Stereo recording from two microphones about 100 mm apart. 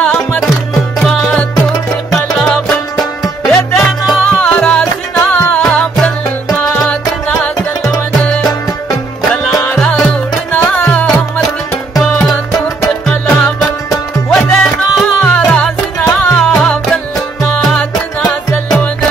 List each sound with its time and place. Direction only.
0.0 s music: 10° left (ahead or behind)
4.4 s music: 10° left (ahead or behind)
5.6 s music: 10° left (ahead or behind)
9.3 s music: centre (ahead or behind)
10.8 s music: 10° left (ahead or behind)
11.4 s music: centre (ahead or behind)